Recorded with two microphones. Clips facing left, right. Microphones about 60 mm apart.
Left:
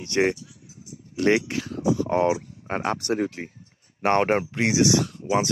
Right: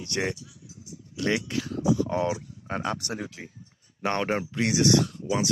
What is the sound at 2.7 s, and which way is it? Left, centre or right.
Speech, left.